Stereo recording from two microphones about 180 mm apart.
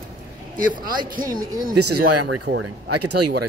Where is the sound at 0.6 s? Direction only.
50° right (ahead or behind).